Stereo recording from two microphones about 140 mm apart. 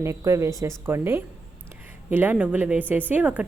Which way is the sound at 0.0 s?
20° right (ahead or behind).